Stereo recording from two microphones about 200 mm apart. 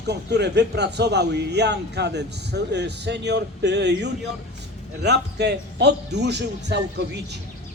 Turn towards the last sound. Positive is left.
turn(degrees=-60)  # may be behind; listen again after turning